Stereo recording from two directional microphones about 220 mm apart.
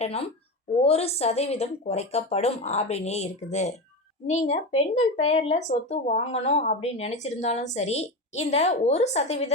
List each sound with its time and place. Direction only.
0.0 s speech: 30° left (ahead or behind)